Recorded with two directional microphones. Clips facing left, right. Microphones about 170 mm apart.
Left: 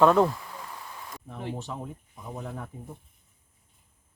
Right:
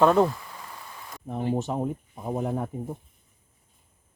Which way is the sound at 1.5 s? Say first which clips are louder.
Right 9 dB; 45° right (ahead or behind).